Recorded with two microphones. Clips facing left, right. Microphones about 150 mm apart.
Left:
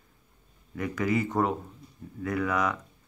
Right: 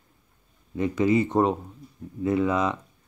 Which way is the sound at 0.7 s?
25° right (ahead or behind).